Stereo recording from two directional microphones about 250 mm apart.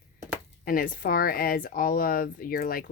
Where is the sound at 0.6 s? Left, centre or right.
Left.